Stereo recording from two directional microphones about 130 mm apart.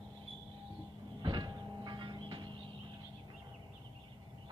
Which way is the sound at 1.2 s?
35° right (ahead or behind).